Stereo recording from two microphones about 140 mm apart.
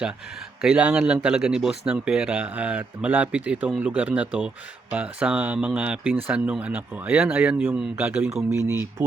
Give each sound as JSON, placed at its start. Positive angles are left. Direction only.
{"t": 0.6, "sound": "a man's voice", "side_deg": -5}